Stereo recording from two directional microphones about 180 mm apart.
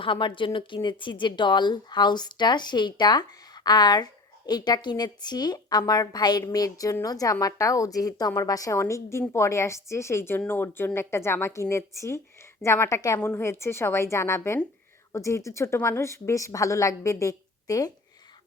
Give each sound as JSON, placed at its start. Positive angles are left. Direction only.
{"t": 0.0, "sound": "a woman's voice", "side_deg": 25}